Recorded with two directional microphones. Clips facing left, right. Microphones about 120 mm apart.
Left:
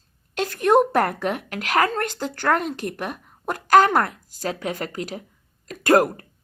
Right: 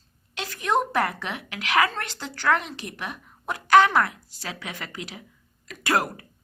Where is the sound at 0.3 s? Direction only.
50° left (ahead or behind).